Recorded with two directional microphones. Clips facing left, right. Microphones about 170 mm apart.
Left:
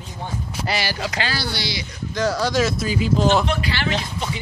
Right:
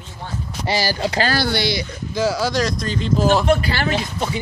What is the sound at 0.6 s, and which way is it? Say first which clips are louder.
Speech: right 5 dB; 30° right (ahead or behind).